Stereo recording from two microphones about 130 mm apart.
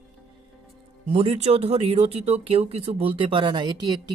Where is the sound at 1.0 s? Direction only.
50° right (ahead or behind).